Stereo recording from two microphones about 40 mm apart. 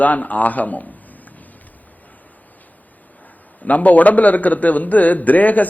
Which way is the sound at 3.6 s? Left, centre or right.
Left.